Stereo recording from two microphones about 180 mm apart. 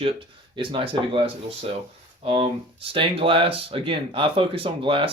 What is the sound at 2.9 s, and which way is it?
Speech, 30° right (ahead or behind).